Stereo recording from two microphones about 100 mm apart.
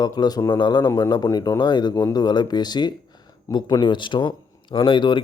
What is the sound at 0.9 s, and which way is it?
Speech, 30° left (ahead or behind).